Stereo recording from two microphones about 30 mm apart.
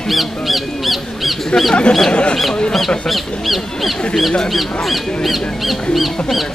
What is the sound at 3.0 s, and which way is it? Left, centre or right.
Honk, centre.